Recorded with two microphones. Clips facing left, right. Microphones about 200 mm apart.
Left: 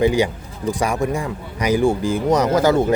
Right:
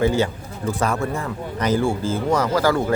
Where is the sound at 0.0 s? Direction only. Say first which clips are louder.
Left 2 dB; 15° left (ahead or behind).